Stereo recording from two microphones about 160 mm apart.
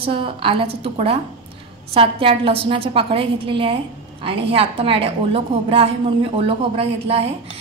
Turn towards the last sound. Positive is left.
turn(degrees=-35)  # may be behind; listen again after turning